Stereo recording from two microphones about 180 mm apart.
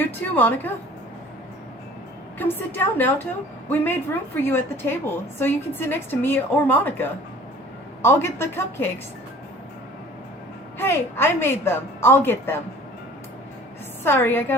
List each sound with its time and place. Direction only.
0.0 s a woman's voice: 10° left (ahead or behind)
2.4 s a woman's voice: 10° left (ahead or behind)
4.4 s a woman's voice: 10° left (ahead or behind)
10.8 s a woman's voice: 10° left (ahead or behind)
14.0 s a woman's voice: 10° left (ahead or behind)